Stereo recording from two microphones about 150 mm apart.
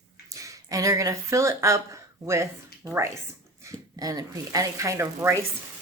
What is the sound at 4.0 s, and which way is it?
A woman's voice, 25° right (ahead or behind).